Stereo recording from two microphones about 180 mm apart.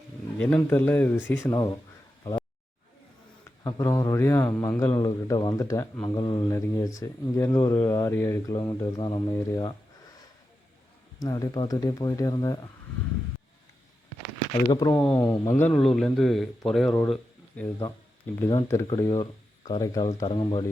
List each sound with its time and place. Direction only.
0.3 s a man's voice: 10° left (ahead or behind)
3.6 s a man's voice: 15° left (ahead or behind)
11.2 s speech: 20° left (ahead or behind)
14.7 s speech: 20° left (ahead or behind)
14.9 s a man's voice: 5° left (ahead or behind); by 20.7 s 30° left (ahead or behind)